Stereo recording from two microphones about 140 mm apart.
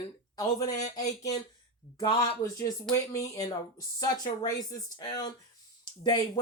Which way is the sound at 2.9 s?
25° left (ahead or behind).